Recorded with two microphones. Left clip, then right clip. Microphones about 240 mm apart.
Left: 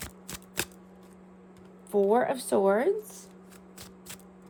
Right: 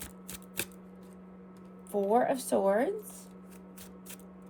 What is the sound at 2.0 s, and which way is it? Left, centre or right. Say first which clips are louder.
Speech: even; left.